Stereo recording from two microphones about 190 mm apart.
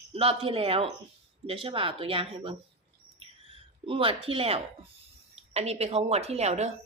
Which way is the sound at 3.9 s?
30° right (ahead or behind).